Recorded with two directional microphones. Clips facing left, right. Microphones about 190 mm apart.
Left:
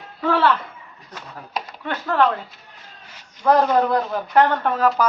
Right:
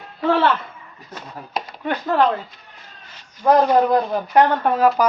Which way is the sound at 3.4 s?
15° right (ahead or behind).